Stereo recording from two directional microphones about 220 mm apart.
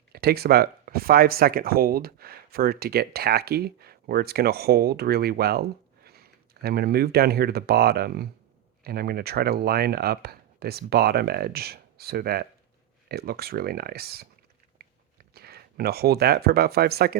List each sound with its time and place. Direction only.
0.1 s speech: 45° right (ahead or behind)
15.4 s speech: 45° right (ahead or behind)